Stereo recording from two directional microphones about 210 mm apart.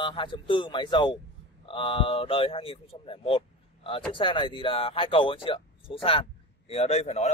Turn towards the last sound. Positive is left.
turn(degrees=30)  # may be behind; listen again after turning